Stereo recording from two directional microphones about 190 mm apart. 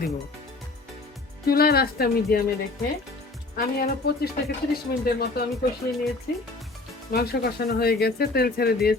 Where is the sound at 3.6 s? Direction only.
55° left (ahead or behind).